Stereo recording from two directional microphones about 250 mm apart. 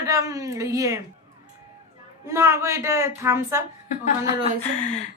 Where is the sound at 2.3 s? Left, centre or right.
Centre.